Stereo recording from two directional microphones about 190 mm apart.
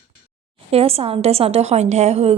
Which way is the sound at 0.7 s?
30° right (ahead or behind).